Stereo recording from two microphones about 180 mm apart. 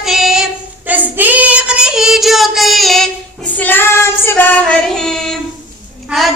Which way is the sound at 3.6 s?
10° left (ahead or behind).